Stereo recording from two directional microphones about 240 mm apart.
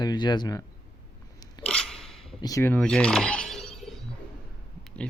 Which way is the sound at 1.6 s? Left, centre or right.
Centre.